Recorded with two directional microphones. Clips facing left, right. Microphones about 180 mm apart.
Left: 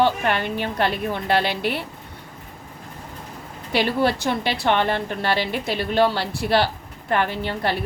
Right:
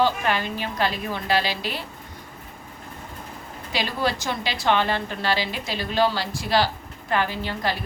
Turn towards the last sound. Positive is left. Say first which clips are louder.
# left 3 dB
turn(degrees=60)  # may be behind; listen again after turning